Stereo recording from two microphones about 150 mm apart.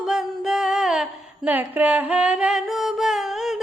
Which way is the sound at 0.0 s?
Centre (ahead or behind).